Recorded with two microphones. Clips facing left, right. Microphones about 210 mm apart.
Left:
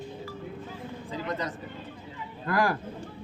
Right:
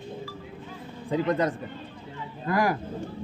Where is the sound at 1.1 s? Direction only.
55° right (ahead or behind).